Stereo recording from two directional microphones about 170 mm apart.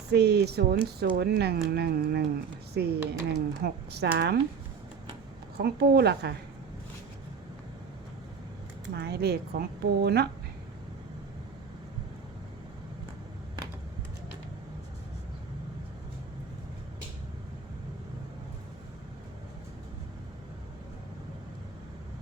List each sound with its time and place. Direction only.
0.1 s speech: 75° right (ahead or behind)
5.5 s speech: 70° right (ahead or behind)
9.0 s speech: 70° right (ahead or behind)